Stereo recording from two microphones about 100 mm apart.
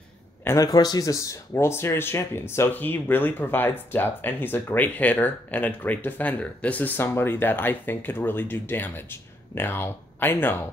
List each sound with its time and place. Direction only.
0.6 s speech: 40° left (ahead or behind); by 10.6 s 20° left (ahead or behind)